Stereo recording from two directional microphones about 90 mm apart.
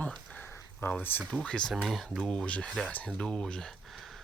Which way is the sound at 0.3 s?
20° left (ahead or behind).